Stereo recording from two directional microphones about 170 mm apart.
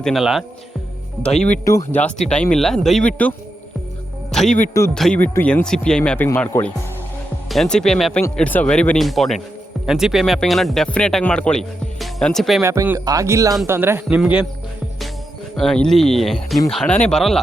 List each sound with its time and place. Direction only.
0.0 s speech: centre (ahead or behind)
1.6 s speech: 15° left (ahead or behind)
4.4 s a man's voice: 50° left (ahead or behind)
4.9 s speech: 5° left (ahead or behind)
12.6 s a man's voice: 15° right (ahead or behind)
15.5 s speech: 5° left (ahead or behind)